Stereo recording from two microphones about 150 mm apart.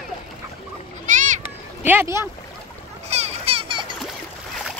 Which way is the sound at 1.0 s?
55° right (ahead or behind).